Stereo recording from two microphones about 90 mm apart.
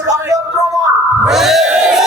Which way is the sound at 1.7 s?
10° right (ahead or behind).